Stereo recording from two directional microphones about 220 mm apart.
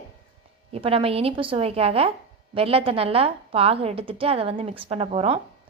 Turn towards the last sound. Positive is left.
turn(degrees=-25)  # may be behind; listen again after turning